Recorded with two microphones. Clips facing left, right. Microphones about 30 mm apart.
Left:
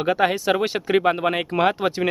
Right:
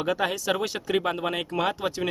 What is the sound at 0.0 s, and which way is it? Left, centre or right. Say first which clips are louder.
Speech: left 6 dB; left.